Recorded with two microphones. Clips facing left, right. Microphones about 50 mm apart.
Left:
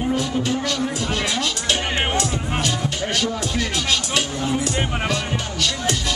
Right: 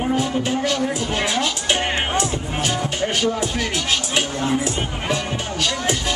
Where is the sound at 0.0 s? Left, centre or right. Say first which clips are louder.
Right 1 dB; right.